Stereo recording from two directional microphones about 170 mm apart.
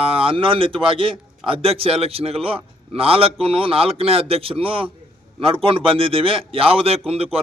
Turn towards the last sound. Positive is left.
turn(degrees=-35)  # may be behind; listen again after turning